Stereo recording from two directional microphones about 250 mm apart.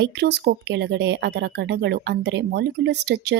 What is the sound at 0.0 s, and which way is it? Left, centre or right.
Speech, right.